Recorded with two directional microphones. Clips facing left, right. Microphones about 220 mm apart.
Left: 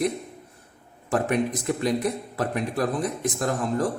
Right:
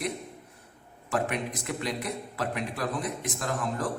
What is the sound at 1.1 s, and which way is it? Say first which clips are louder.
A man's voice: left 6 dB; 40° left (ahead or behind).